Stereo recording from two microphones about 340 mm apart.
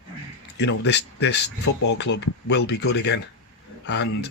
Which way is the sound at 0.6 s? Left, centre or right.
Left.